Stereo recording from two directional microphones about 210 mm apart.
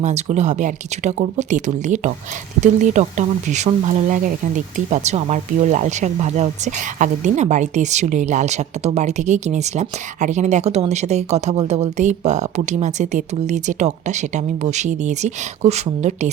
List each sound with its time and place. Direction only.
0.0 s speech: 35° right (ahead or behind)